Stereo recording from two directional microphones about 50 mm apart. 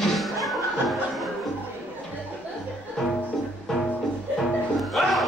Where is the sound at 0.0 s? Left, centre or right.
Centre.